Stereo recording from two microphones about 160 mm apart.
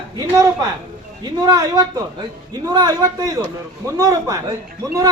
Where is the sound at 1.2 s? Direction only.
25° right (ahead or behind).